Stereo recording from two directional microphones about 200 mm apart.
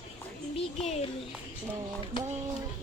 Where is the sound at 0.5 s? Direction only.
35° left (ahead or behind).